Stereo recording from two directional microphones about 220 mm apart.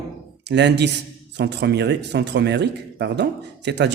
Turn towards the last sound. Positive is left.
turn(degrees=-50)  # may be behind; listen again after turning